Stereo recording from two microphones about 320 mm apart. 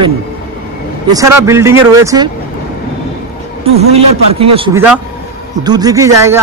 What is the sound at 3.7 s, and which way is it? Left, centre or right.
Speech, centre.